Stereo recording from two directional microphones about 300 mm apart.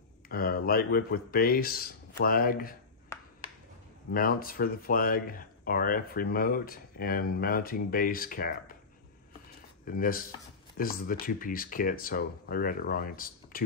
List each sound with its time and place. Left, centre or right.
0.3 s speech: left
4.1 s speech: left
9.8 s speech: left